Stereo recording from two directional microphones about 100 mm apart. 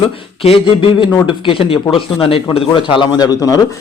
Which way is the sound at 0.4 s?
65° left (ahead or behind).